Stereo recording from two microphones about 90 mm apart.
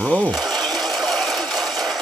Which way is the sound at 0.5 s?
Centre (ahead or behind).